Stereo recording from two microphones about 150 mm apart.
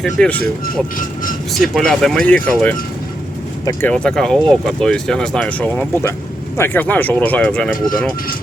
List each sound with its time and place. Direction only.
0.0 s speech: 5° left (ahead or behind)
1.5 s speech: centre (ahead or behind)
3.9 s speech: 5° left (ahead or behind)